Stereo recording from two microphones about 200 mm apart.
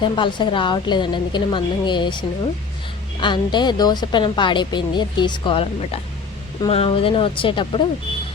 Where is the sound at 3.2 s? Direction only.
20° left (ahead or behind).